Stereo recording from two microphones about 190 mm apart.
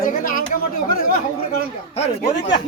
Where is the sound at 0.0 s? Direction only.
45° left (ahead or behind).